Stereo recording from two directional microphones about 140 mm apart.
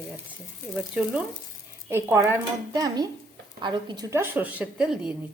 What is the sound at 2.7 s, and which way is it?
Speech, 30° right (ahead or behind).